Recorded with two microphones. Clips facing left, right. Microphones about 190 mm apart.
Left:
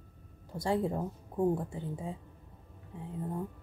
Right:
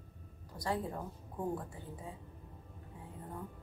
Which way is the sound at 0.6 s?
25° left (ahead or behind).